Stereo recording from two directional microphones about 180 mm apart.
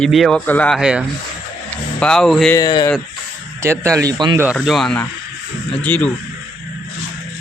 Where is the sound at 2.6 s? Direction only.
20° left (ahead or behind).